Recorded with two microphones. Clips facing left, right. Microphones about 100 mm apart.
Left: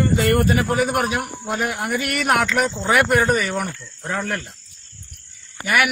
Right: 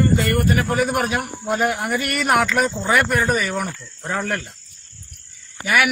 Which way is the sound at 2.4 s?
Centre (ahead or behind).